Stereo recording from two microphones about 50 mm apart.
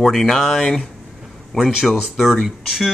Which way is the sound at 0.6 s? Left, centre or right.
Centre.